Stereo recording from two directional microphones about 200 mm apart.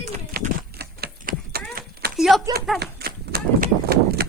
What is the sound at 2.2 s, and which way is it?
Speech, centre (ahead or behind).